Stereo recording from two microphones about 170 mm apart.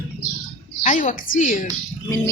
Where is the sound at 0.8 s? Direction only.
50° left (ahead or behind).